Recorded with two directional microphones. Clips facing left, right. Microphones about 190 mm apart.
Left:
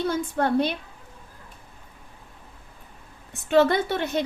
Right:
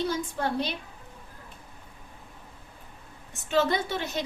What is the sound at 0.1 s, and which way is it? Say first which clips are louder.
Speech: left 6 dB; 55° left (ahead or behind).